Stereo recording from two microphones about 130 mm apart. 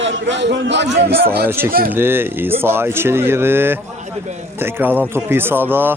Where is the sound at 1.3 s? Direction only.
15° right (ahead or behind).